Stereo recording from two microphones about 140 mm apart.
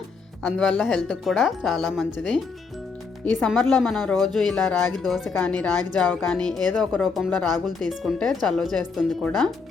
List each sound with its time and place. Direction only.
0.4 s speech: centre (ahead or behind)
3.5 s speech: centre (ahead or behind)